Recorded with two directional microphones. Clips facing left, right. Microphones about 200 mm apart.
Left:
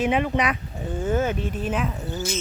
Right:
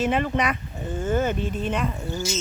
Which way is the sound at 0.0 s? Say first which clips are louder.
Left 1 dB; 5° left (ahead or behind).